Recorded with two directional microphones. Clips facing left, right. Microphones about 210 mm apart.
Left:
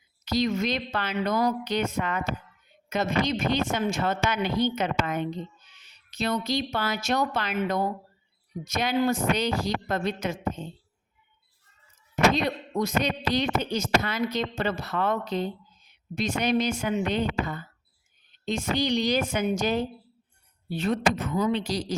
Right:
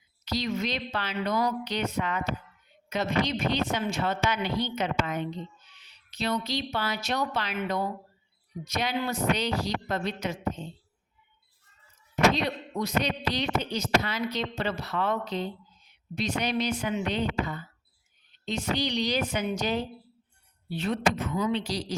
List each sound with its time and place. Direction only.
0.3 s speech: 50° left (ahead or behind)
12.1 s speech: 45° left (ahead or behind)